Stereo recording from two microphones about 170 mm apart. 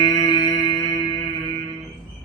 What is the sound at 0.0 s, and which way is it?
Music, 25° left (ahead or behind).